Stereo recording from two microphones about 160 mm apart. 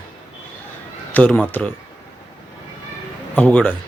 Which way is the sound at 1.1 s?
10° left (ahead or behind).